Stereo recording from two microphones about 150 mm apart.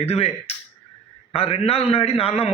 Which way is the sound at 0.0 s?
45° left (ahead or behind).